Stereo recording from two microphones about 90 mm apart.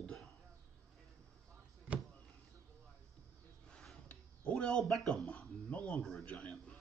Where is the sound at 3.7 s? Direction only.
10° left (ahead or behind).